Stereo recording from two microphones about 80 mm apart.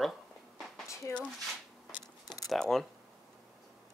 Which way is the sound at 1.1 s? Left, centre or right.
Left.